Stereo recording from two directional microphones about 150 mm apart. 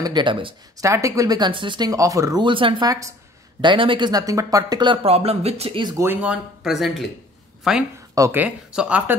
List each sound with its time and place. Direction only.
0.0 s speech: 30° right (ahead or behind)
0.7 s speech: 20° right (ahead or behind)
2.9 s speech: 20° right (ahead or behind)
3.6 s speech: 35° right (ahead or behind)
5.0 s speech: 40° right (ahead or behind)
5.9 s speech: 10° right (ahead or behind)
8.1 s speech: 20° right (ahead or behind)